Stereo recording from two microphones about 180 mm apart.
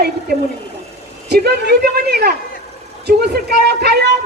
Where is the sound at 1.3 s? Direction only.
65° right (ahead or behind).